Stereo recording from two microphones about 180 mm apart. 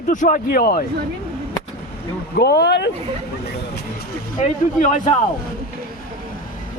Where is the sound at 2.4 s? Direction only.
65° left (ahead or behind).